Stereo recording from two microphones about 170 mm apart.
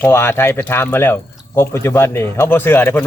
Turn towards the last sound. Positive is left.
turn(degrees=10)  # may be behind; listen again after turning